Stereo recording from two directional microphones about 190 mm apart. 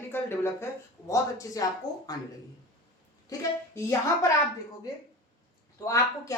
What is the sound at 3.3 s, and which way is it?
Speech, 20° left (ahead or behind).